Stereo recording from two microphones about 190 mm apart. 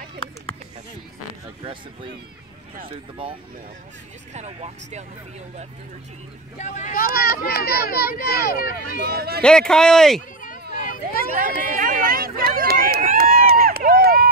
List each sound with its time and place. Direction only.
2.9 s speech: 25° right (ahead or behind)
6.6 s speech: 40° left (ahead or behind)
9.0 s speech: 55° right (ahead or behind)
9.4 s speech: 5° left (ahead or behind)
10.7 s hubbub: 45° left (ahead or behind)
11.3 s run: 45° right (ahead or behind)